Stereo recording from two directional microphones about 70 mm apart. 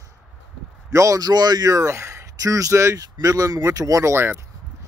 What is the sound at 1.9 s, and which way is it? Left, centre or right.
Speech, right.